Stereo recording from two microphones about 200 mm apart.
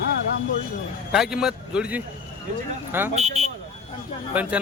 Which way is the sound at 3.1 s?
30° right (ahead or behind).